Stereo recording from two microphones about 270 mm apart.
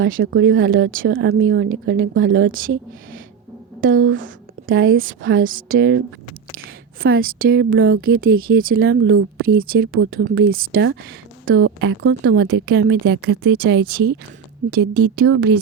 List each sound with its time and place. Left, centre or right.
0.0 s speech: right
3.8 s a woman's voice: right
7.0 s speech: right
11.4 s speech: right